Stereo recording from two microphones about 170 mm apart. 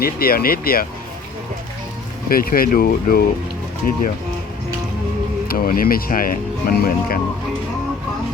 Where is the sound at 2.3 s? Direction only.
60° left (ahead or behind).